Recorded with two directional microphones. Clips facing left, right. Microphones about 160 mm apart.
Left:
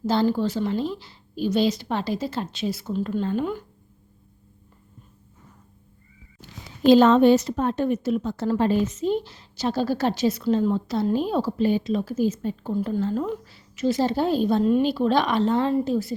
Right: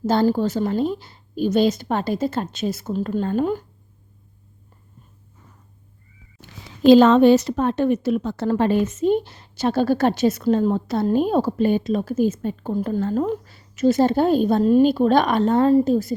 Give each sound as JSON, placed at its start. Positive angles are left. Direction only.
{"t": 0.0, "sound": "a woman's voice", "side_deg": -45}
{"t": 6.4, "sound": "a woman's voice", "side_deg": -90}